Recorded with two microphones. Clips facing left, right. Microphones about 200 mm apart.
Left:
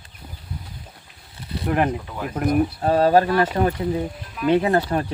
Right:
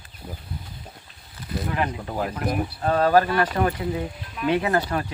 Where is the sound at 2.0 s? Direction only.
40° right (ahead or behind).